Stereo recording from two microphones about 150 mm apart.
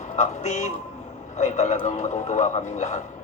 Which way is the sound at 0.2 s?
50° left (ahead or behind).